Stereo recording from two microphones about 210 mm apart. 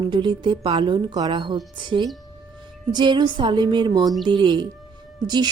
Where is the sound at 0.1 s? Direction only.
25° right (ahead or behind).